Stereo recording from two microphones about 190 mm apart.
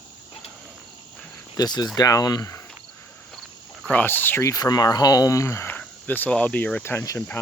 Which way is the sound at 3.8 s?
5° left (ahead or behind).